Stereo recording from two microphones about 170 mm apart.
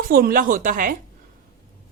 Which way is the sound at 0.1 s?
60° right (ahead or behind).